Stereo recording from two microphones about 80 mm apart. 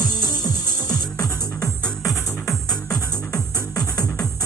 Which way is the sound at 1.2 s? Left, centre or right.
Left.